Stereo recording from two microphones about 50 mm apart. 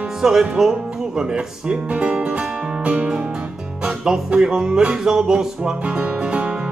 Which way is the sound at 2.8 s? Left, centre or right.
Right.